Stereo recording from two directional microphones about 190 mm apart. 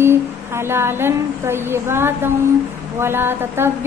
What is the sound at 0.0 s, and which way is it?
A woman's voice, 15° right (ahead or behind).